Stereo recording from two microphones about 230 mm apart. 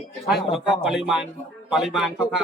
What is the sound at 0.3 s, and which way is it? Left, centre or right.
A man's voice, centre.